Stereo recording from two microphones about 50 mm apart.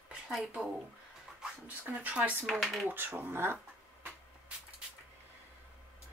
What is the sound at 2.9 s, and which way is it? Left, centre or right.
Speech, right.